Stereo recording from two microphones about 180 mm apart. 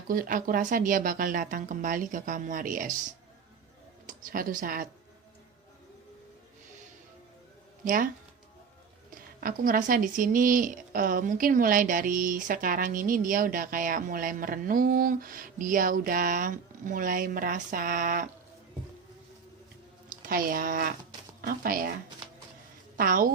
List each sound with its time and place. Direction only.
0.1 s speech: 50° right (ahead or behind)
4.0 s speech: 50° right (ahead or behind)
7.9 s speech: 50° right (ahead or behind)
9.4 s speech: 50° right (ahead or behind)
20.1 s speech: 50° right (ahead or behind)
23.0 s speech: 50° right (ahead or behind)